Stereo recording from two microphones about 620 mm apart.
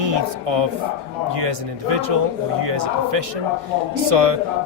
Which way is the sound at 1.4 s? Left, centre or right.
Right.